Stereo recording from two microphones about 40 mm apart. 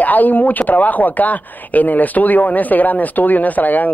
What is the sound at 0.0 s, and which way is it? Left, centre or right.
Speech, left.